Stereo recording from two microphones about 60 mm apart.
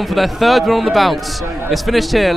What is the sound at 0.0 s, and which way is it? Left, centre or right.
Speech, centre.